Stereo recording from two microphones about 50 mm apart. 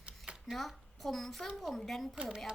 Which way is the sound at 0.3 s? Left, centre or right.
Right.